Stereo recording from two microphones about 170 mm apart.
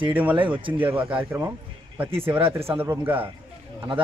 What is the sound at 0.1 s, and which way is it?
A man's voice, 10° right (ahead or behind).